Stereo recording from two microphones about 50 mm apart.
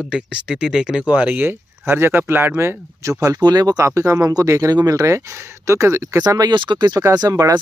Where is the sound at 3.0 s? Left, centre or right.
Right.